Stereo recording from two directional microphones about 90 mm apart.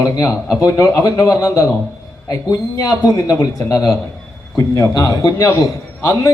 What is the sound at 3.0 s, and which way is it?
Speech, 40° left (ahead or behind).